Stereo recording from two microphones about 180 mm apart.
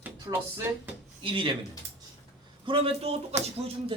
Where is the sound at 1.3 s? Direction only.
25° right (ahead or behind).